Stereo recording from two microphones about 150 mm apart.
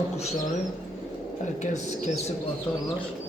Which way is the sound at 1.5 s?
50° left (ahead or behind).